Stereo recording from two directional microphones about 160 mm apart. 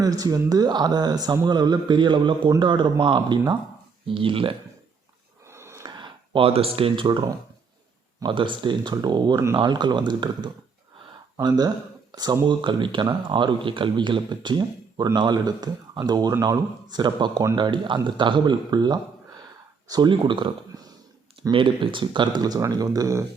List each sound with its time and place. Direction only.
0.0 s speech: 25° right (ahead or behind)
5.5 s a sound: 15° right (ahead or behind); by 6.7 s 35° right (ahead or behind)
6.7 s speech: 35° right (ahead or behind)